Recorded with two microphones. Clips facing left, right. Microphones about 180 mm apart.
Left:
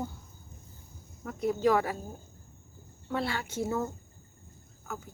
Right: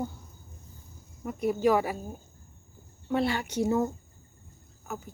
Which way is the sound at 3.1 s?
20° right (ahead or behind).